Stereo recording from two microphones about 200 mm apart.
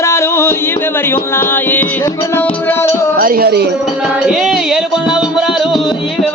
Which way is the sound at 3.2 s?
45° right (ahead or behind).